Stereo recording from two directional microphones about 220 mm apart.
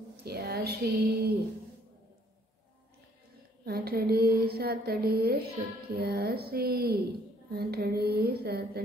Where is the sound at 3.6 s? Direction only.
45° right (ahead or behind).